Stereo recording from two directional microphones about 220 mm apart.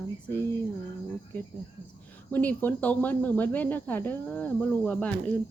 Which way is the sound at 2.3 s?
5° left (ahead or behind).